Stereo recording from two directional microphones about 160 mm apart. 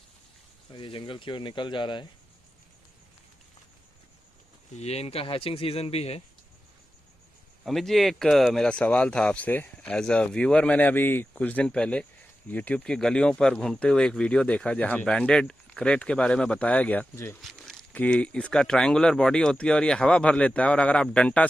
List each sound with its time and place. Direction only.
0.7 s speech: 30° left (ahead or behind)
4.7 s speech: 40° left (ahead or behind)
7.6 s speech: centre (ahead or behind)
17.4 s speech: centre (ahead or behind)